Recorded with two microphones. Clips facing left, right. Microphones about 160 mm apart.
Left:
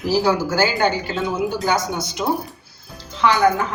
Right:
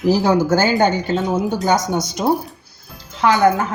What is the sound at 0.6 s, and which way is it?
Speech, 45° right (ahead or behind).